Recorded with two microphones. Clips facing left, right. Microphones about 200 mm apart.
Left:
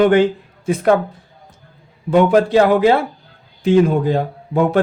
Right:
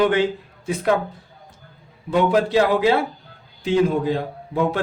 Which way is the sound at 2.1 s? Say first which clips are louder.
Left 5 dB; 50° left (ahead or behind).